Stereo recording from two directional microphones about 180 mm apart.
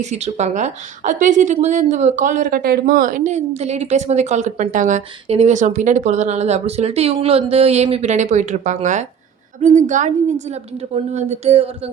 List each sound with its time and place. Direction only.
0.0 s a woman's voice: 40° right (ahead or behind)